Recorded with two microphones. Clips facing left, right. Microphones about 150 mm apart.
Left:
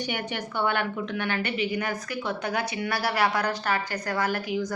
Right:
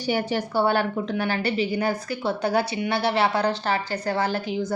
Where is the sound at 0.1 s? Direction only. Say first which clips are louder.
Right 7 dB; 30° right (ahead or behind).